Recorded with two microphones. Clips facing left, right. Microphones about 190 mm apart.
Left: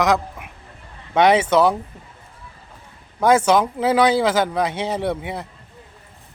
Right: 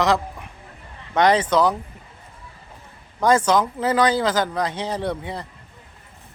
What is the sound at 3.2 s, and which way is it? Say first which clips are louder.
Speech: left 2 dB; 5° left (ahead or behind).